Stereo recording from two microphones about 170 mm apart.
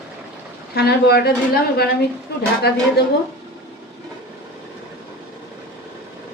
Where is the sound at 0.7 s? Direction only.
70° left (ahead or behind).